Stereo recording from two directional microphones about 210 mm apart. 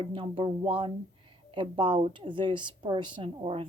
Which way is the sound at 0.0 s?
25° right (ahead or behind).